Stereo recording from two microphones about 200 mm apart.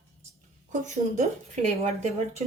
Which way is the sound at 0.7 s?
35° right (ahead or behind).